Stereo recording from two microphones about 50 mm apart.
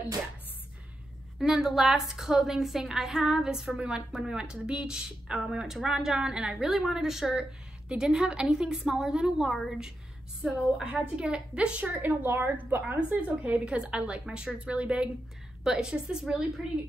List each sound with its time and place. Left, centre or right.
1.4 s speech: centre
3.6 s a woman's voice: right
12.0 s a woman's voice: right
13.1 s a woman's voice: right; by 14.5 s centre
14.5 s a woman's voice: right